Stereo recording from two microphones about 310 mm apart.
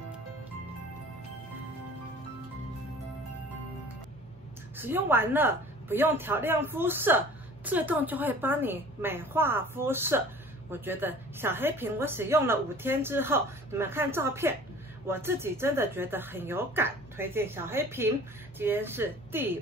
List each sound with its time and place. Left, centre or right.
4.7 s a woman's voice: centre